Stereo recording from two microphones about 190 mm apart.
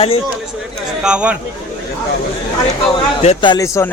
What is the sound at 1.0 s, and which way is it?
Speech, 5° right (ahead or behind).